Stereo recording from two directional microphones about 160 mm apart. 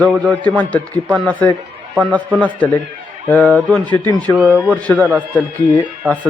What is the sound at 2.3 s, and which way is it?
Speech, 10° right (ahead or behind).